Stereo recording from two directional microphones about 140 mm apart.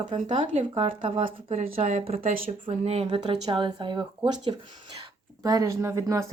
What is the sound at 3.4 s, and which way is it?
Speech, 35° right (ahead or behind).